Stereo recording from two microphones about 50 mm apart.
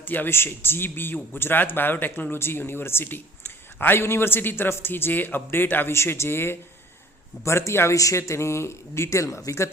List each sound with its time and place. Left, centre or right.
0.0 s speech: left
0.3 s speech: left
5.9 s speech: left
7.4 s speech: left